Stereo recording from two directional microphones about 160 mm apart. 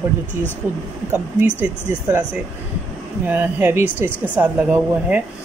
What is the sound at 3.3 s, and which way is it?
Speech, 10° right (ahead or behind).